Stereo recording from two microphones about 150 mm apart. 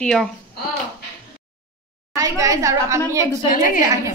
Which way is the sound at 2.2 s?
25° right (ahead or behind).